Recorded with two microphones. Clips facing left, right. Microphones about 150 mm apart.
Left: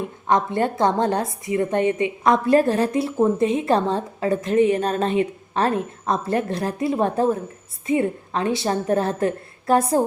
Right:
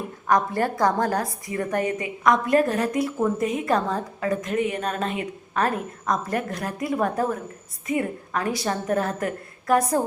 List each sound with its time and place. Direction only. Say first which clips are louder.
0.3 s a woman's voice: left 2 dB; 25° left (ahead or behind)